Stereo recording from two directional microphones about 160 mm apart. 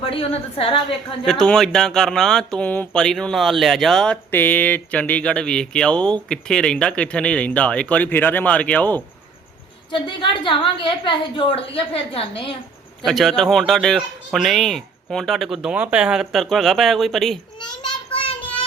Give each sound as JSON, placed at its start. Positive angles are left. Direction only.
{"t": 0.0, "sound": "a woman's voice", "side_deg": 35}
{"t": 1.2, "sound": "speech", "side_deg": 5}
{"t": 9.9, "sound": "a woman's voice", "side_deg": 30}
{"t": 13.1, "sound": "speech", "side_deg": 0}